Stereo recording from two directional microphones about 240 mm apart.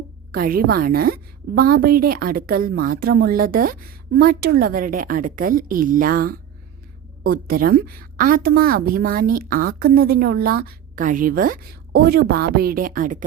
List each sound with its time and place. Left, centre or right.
0.3 s a woman's voice: right